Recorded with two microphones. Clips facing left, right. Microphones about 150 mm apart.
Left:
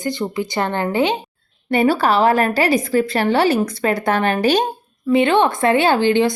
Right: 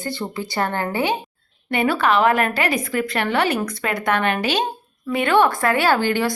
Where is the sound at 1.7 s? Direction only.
35° left (ahead or behind).